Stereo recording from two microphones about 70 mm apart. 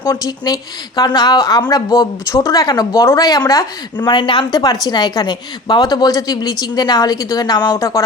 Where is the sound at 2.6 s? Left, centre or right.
Left.